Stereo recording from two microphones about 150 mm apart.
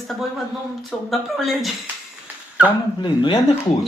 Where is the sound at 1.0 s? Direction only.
Centre (ahead or behind).